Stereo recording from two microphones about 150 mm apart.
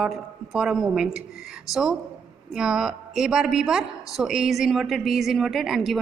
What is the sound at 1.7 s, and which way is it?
Speech, 20° left (ahead or behind).